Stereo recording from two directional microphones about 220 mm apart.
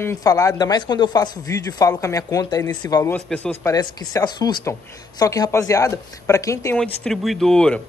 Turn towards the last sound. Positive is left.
turn(degrees=5)  # may be behind; listen again after turning